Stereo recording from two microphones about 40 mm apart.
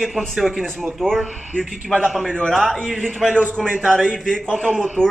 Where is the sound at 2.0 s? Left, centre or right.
Centre.